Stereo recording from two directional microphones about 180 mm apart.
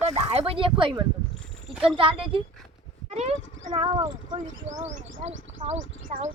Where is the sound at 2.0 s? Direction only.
30° right (ahead or behind).